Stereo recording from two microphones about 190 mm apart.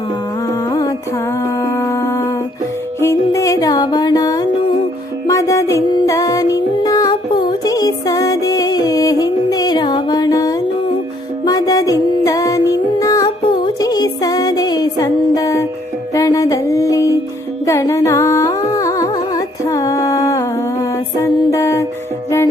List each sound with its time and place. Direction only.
0.4 s music: 20° left (ahead or behind)